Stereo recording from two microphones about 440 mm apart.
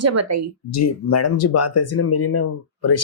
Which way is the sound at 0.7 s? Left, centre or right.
Left.